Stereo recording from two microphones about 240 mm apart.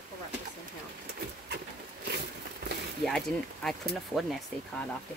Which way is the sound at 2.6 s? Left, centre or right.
Right.